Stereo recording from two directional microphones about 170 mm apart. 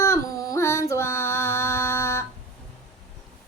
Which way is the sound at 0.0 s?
20° left (ahead or behind).